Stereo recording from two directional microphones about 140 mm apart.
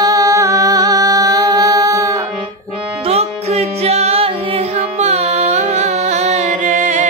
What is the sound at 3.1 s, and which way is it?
Music, 50° right (ahead or behind).